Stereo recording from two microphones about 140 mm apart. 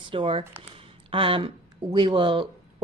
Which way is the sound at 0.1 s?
40° right (ahead or behind).